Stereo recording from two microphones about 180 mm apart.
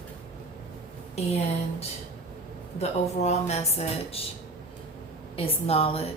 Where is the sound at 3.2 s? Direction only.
35° left (ahead or behind).